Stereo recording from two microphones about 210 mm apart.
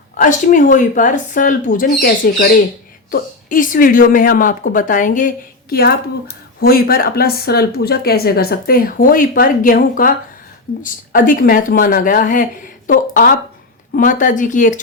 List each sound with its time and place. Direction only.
0.1 s a woman's voice: 40° left (ahead or behind)